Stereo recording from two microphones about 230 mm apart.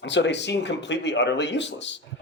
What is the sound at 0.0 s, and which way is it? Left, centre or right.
Speech, left.